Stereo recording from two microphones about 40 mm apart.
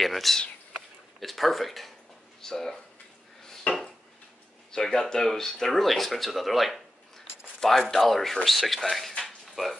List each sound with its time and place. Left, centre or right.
0.0 s speech: centre
3.7 s dishes: left
4.6 s speech: centre
7.9 s speech: centre
9.2 s a sound: centre